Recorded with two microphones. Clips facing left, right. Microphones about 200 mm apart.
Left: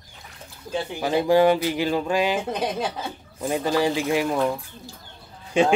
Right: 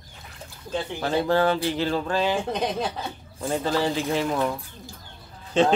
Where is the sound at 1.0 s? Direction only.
10° left (ahead or behind).